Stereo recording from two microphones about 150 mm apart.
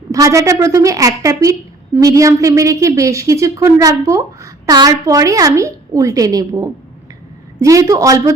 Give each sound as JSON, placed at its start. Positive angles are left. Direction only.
{"t": 0.1, "sound": "speech", "side_deg": -20}